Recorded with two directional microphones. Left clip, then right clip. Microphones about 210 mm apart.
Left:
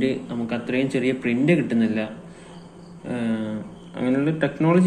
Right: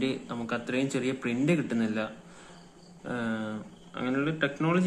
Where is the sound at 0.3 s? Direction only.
25° right (ahead or behind).